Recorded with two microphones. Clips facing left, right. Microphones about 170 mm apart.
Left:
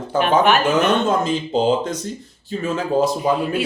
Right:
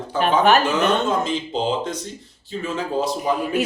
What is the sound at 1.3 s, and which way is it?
Speech, 45° left (ahead or behind).